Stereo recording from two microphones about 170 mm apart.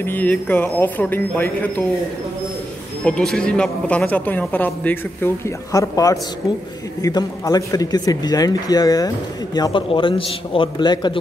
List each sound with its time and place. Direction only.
0.0 s a man's voice: 10° left (ahead or behind)
3.1 s a man's voice: 5° left (ahead or behind); by 11.1 s 25° left (ahead or behind)